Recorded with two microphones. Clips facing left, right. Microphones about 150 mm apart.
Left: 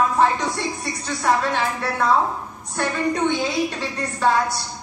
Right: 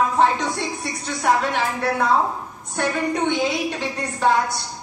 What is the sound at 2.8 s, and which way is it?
A woman's voice, 20° right (ahead or behind).